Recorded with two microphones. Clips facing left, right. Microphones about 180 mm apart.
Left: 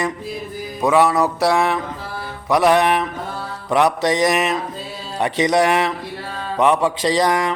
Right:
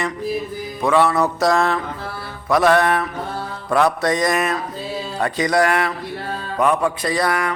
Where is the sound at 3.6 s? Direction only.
20° left (ahead or behind).